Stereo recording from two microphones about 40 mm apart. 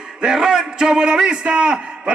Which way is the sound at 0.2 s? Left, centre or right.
Centre.